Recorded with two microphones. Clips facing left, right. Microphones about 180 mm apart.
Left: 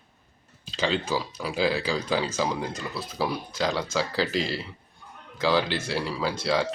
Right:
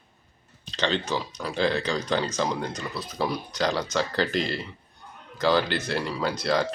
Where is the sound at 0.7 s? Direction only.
5° left (ahead or behind).